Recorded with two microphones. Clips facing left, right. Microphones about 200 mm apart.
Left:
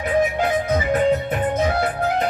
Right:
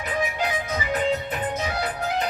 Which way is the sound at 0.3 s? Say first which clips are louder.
Left 7 dB; 55° left (ahead or behind).